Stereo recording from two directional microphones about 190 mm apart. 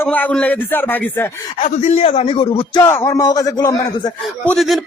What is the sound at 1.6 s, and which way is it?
A man's voice, 35° left (ahead or behind).